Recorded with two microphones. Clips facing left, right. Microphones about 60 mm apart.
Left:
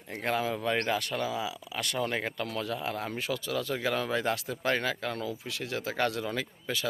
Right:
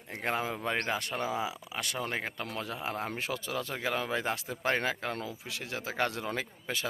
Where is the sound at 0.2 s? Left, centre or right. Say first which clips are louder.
Left 3 dB; right.